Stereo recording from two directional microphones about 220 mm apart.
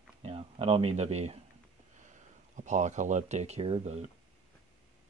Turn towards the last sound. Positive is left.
turn(degrees=-25)  # may be behind; listen again after turning